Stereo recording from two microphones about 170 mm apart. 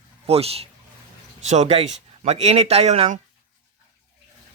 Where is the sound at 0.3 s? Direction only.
35° right (ahead or behind).